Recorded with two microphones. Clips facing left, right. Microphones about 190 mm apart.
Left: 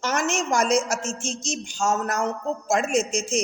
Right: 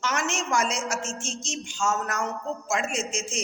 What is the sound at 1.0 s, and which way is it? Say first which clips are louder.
Music: left 4 dB; centre (ahead or behind).